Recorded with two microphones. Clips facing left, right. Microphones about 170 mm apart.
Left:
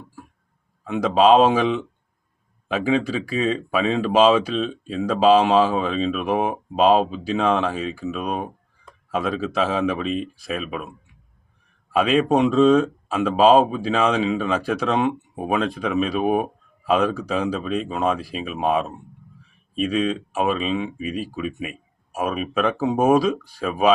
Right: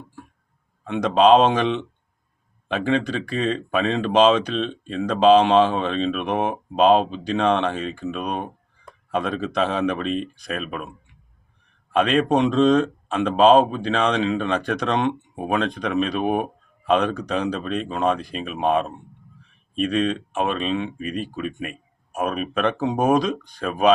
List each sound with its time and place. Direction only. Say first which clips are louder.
0.9 s speech: even; 5° left (ahead or behind)